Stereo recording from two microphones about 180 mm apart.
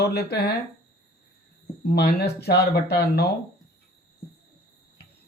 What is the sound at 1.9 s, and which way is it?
Speech, 65° left (ahead or behind).